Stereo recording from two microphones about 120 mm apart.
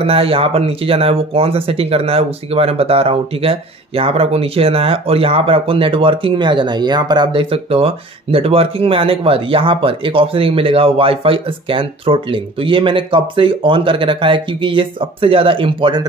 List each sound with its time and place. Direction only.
0.0 s speech: 55° right (ahead or behind)